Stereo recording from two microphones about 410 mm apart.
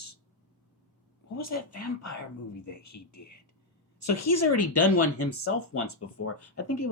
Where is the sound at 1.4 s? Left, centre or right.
Left.